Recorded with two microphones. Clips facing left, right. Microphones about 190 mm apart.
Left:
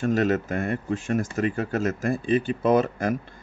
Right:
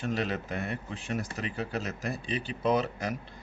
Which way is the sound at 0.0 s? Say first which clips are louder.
Left 9 dB; 45° left (ahead or behind).